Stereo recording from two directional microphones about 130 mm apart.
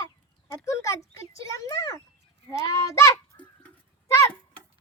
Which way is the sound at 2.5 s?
20° left (ahead or behind).